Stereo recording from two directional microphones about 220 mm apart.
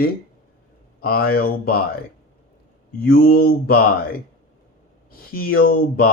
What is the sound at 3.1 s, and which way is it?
Speech, 45° left (ahead or behind).